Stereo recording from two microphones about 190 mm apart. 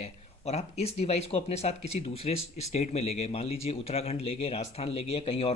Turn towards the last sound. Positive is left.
turn(degrees=30)  # may be behind; listen again after turning